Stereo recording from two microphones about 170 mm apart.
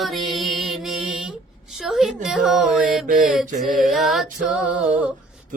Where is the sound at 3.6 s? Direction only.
Centre (ahead or behind).